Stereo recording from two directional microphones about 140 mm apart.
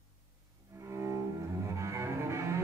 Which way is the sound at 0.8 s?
20° right (ahead or behind).